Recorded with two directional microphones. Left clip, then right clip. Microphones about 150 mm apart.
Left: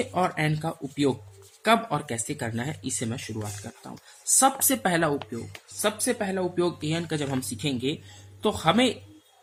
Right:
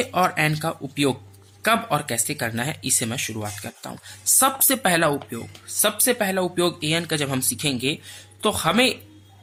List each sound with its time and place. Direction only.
0.0 s speech: 20° right (ahead or behind)
4.4 s speech: 20° right (ahead or behind)
5.8 s speech: 30° right (ahead or behind)